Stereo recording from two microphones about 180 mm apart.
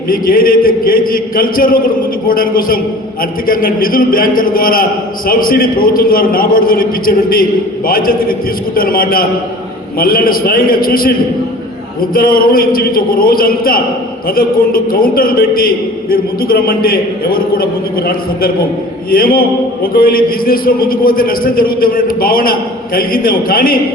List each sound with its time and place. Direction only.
0.1 s a man's voice: 55° left (ahead or behind)
12.1 s a man's voice: 55° left (ahead or behind)